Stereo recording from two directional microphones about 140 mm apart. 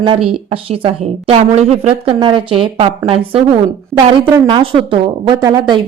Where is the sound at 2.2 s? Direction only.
35° right (ahead or behind).